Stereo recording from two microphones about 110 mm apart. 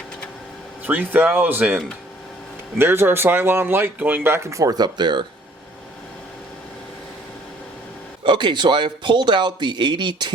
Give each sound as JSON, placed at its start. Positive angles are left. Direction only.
{"t": 0.9, "sound": "speech", "side_deg": -15}
{"t": 8.2, "sound": "a man's voice", "side_deg": -45}